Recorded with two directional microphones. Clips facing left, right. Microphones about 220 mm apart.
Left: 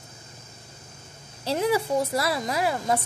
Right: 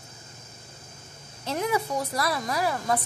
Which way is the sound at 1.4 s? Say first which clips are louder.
Left 3 dB; 30° left (ahead or behind).